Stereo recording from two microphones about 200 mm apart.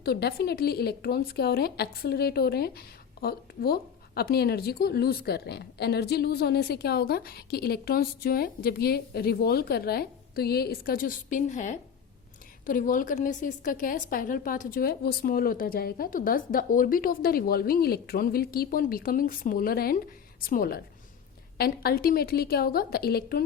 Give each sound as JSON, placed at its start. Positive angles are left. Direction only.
{"t": 0.0, "sound": "speech", "side_deg": 55}